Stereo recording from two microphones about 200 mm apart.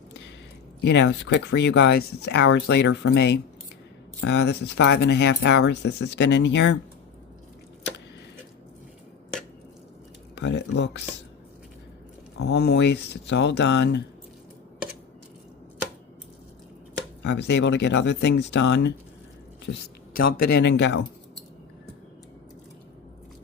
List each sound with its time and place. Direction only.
0.8 s speech: 55° left (ahead or behind)
10.3 s speech: 60° left (ahead or behind)
12.4 s speech: 55° left (ahead or behind)
17.2 s speech: 60° left (ahead or behind)
20.1 s speech: 50° left (ahead or behind)